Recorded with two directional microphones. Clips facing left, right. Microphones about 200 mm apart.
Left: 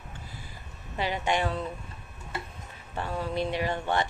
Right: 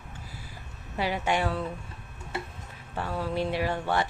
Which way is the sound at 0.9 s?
10° right (ahead or behind).